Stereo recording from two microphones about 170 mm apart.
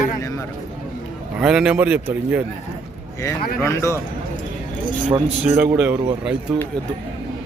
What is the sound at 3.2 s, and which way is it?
Speech, 15° left (ahead or behind).